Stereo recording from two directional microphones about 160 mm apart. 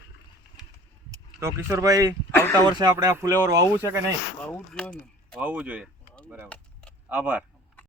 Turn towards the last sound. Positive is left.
turn(degrees=-10)  # may be behind; listen again after turning